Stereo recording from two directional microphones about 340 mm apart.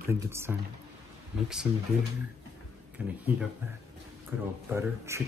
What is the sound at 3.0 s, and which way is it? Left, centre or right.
Speech, centre.